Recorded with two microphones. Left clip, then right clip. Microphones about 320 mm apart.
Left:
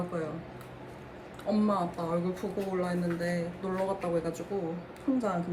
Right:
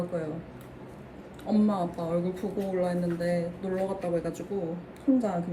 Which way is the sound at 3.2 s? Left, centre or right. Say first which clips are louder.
Right 4 dB; centre.